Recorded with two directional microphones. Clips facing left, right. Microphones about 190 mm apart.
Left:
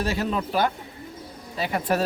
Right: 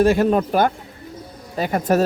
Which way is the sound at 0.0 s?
50° right (ahead or behind).